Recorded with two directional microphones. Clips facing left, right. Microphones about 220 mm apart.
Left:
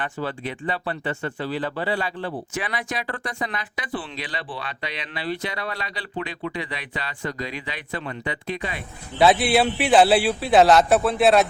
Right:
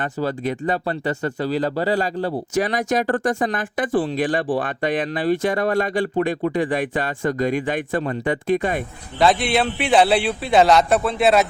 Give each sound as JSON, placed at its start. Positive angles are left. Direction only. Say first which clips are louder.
{"t": 0.0, "sound": "speech", "louder": "right 6 dB", "side_deg": -40}
{"t": 9.1, "sound": "speech", "louder": "even", "side_deg": 5}